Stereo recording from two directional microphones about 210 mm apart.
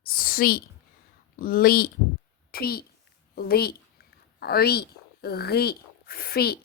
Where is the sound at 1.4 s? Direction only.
45° left (ahead or behind).